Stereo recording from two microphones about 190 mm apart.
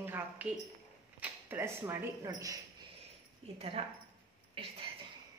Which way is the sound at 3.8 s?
35° right (ahead or behind).